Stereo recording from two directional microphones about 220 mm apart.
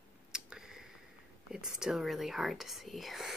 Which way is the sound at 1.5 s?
Centre (ahead or behind).